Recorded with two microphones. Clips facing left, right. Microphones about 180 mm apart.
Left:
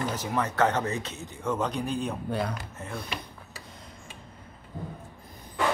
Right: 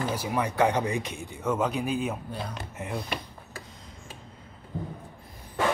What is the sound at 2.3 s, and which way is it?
Speech, 65° left (ahead or behind).